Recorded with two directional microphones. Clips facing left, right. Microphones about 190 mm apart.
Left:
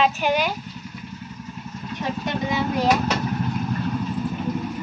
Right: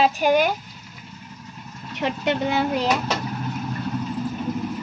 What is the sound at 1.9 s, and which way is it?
Speech, 70° right (ahead or behind).